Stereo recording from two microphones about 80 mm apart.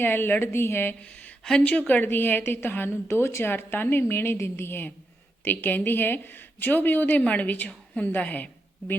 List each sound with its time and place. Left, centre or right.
0.0 s speech: left